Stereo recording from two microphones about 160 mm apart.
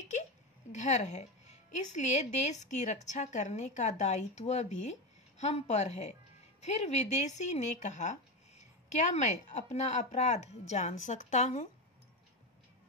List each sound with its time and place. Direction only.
0.7 s speech: 45° left (ahead or behind)